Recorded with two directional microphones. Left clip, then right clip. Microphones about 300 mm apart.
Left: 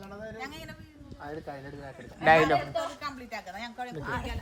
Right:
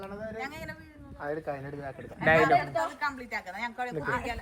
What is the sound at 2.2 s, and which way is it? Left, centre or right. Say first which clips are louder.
Speech: left 1 dB; centre.